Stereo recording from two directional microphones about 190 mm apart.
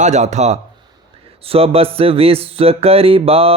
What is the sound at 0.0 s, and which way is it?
Music, 35° right (ahead or behind).